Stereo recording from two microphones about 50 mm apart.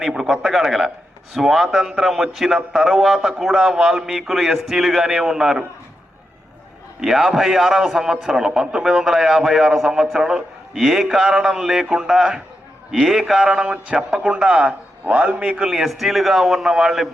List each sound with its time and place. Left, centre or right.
0.0 s a man's voice: centre
7.0 s a man's voice: centre; by 15.6 s right
15.6 s a man's voice: centre